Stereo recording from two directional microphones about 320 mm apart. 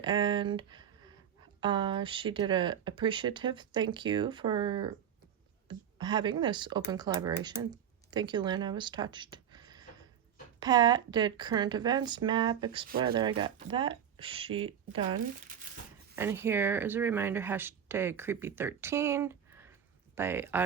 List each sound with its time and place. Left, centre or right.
0.0 s speech: centre
16.1 s speech: centre